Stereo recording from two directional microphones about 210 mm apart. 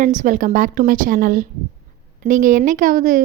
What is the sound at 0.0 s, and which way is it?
A woman's voice, 35° right (ahead or behind).